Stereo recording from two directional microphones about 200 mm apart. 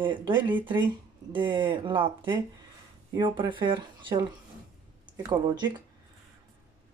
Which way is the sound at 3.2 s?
25° right (ahead or behind).